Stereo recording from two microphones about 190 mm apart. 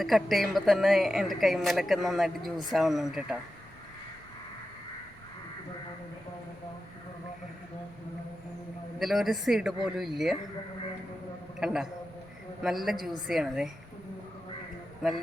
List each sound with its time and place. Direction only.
0.0 s a woman's voice: centre (ahead or behind)
9.0 s a woman's voice: centre (ahead or behind)
11.6 s a woman's voice: 5° right (ahead or behind)